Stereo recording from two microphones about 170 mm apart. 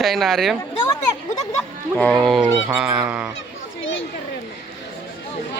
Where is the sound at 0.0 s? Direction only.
Centre (ahead or behind).